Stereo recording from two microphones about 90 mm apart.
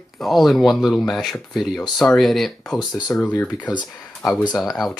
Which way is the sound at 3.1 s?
25° left (ahead or behind).